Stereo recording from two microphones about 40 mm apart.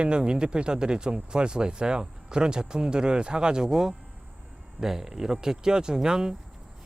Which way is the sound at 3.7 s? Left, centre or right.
Centre.